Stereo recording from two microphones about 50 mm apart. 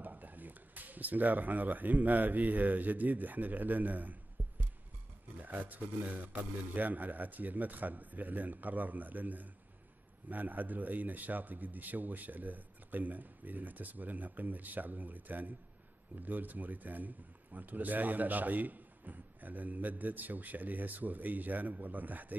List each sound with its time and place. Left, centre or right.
0.0 s speech: right